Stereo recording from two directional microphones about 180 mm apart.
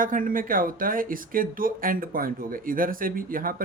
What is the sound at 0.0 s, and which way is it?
Speech, 50° right (ahead or behind).